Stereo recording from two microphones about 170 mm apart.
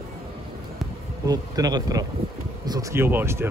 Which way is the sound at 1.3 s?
20° right (ahead or behind).